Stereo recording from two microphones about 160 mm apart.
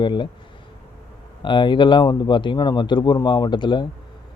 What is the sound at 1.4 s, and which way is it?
A man's voice, 30° left (ahead or behind).